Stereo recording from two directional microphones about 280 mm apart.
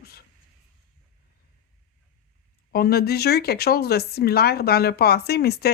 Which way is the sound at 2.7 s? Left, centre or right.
Left.